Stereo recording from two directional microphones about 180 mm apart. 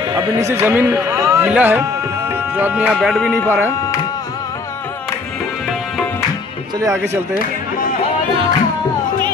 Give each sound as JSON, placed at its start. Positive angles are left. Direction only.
{"t": 0.1, "sound": "speech", "side_deg": -15}
{"t": 3.4, "sound": "speech", "side_deg": -10}
{"t": 7.0, "sound": "speech", "side_deg": 55}